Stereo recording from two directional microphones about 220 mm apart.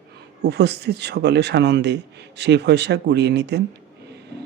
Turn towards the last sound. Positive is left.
turn(degrees=-50)  # may be behind; listen again after turning